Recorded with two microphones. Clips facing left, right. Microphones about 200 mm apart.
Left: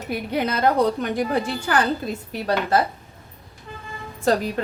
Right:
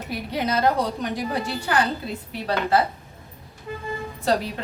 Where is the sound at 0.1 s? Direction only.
55° left (ahead or behind).